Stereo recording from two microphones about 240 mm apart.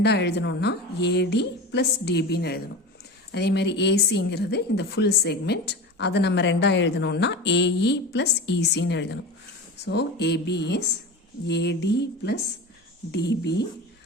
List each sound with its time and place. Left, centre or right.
0.0 s a woman's voice: left